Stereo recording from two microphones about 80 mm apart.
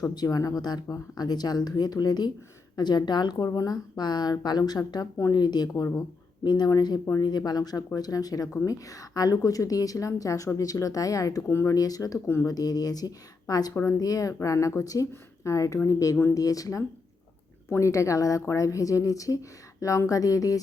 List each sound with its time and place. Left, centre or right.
0.1 s speech: left
3.3 s a woman's voice: left
11.8 s a woman's voice: left